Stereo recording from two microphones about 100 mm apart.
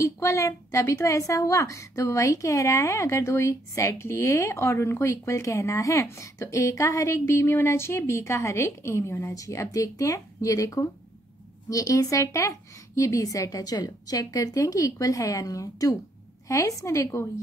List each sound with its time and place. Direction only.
0.0 s a woman's voice: 30° left (ahead or behind)